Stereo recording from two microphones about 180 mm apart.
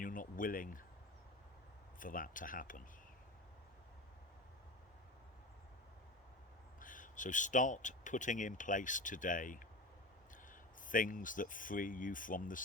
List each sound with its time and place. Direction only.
0.0 s speech: 50° left (ahead or behind)
2.0 s speech: 50° left (ahead or behind)
6.7 s speech: 45° left (ahead or behind)
10.8 s speech: 50° left (ahead or behind)